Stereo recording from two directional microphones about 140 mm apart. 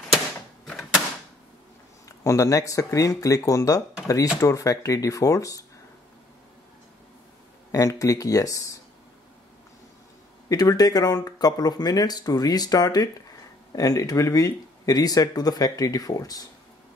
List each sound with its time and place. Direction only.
0.7 s a sound: centre (ahead or behind)
2.0 s speech: 20° left (ahead or behind)
7.7 s speech: 25° left (ahead or behind)
10.5 s speech: 25° left (ahead or behind)